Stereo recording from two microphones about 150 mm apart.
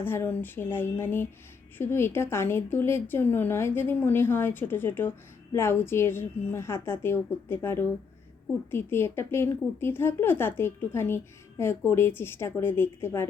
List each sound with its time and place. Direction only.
0.0 s a woman's voice: 15° left (ahead or behind)